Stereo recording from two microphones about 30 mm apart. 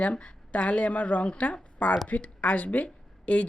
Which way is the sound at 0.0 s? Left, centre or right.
Left.